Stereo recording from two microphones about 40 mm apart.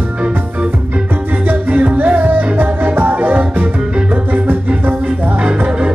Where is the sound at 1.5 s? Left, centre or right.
Right.